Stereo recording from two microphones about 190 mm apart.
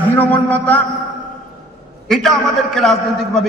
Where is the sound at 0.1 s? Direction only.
10° left (ahead or behind).